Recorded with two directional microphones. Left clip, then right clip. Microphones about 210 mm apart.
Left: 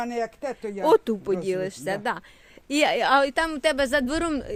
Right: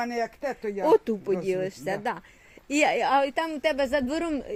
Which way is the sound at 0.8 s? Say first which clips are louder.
Left 2 dB; 15° left (ahead or behind).